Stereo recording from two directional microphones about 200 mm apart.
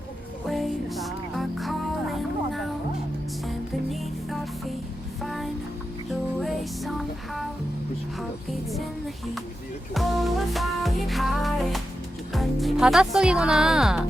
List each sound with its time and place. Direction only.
0.4 s music: centre (ahead or behind)
5.2 s music: centre (ahead or behind)
9.9 s music: centre (ahead or behind)
12.3 s speech: centre (ahead or behind)